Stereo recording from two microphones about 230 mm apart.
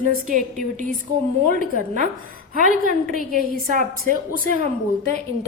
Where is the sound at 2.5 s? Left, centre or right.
Right.